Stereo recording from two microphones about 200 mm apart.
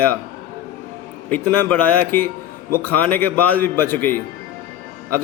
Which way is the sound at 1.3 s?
10° left (ahead or behind).